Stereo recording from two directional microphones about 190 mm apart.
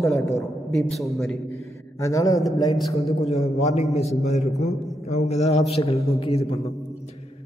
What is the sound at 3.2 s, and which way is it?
A man's voice, 35° left (ahead or behind).